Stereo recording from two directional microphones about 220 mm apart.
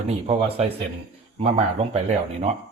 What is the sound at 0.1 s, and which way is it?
Speech, 25° right (ahead or behind).